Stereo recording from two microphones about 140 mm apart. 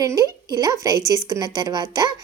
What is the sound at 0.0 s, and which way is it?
A woman's voice, 25° right (ahead or behind).